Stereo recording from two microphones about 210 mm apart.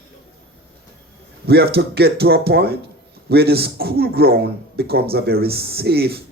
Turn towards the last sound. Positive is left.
turn(degrees=-50)  # may be behind; listen again after turning